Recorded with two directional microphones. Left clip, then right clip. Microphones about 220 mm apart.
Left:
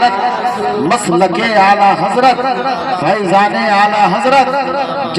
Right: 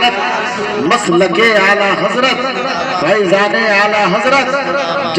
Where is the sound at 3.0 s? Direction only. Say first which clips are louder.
Even; 50° left (ahead or behind).